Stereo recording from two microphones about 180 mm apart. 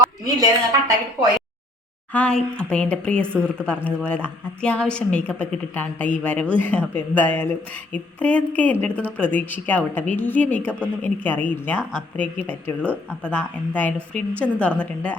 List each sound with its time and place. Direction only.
0.3 s a woman's voice: 20° right (ahead or behind)
2.1 s speech: 5° left (ahead or behind)